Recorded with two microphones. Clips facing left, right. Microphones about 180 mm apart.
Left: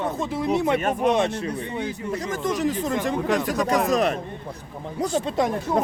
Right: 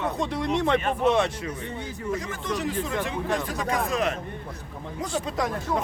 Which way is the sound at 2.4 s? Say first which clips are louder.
Left 8 dB; 45° left (ahead or behind).